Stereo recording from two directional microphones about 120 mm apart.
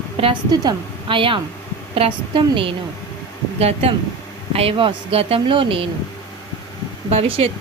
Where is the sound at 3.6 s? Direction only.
60° right (ahead or behind).